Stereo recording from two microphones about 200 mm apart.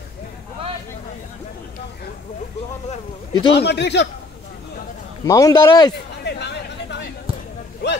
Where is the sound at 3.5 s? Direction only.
55° left (ahead or behind).